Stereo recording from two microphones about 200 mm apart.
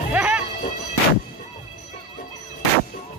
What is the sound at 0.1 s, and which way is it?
Music, 5° right (ahead or behind).